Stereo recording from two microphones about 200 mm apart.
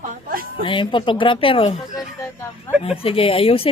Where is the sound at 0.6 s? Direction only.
25° left (ahead or behind).